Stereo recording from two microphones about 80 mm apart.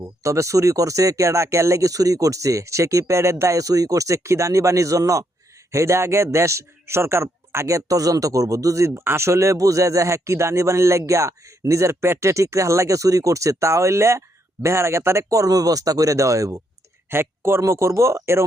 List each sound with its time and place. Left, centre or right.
0.2 s a man's voice: right
17.1 s a man's voice: right